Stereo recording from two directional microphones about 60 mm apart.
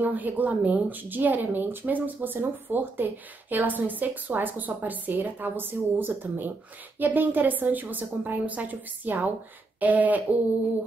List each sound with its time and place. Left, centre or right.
0.0 s a woman's voice: right